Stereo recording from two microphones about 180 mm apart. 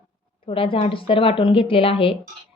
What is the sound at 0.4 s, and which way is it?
Speech, 30° left (ahead or behind).